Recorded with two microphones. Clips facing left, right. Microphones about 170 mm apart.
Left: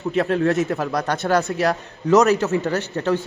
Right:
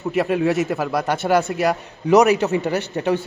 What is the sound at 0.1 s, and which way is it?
A man's voice, 10° right (ahead or behind).